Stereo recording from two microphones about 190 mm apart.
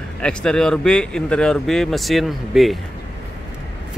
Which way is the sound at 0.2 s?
5° left (ahead or behind).